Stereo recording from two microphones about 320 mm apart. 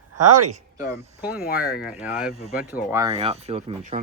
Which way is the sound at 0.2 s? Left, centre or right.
Right.